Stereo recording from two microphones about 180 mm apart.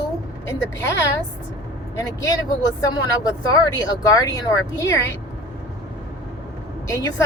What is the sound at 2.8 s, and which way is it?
Speech, 20° left (ahead or behind).